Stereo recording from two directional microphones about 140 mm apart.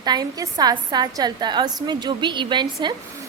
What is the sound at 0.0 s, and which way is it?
A woman's voice, 30° right (ahead or behind).